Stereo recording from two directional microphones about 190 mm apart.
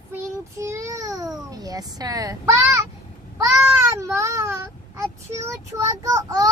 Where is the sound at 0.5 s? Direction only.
15° right (ahead or behind).